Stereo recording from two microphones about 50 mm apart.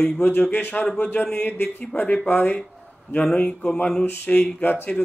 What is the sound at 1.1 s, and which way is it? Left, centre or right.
Speech, left.